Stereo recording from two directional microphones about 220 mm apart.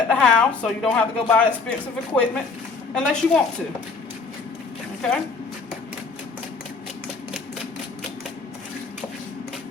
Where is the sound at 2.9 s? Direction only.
5° left (ahead or behind).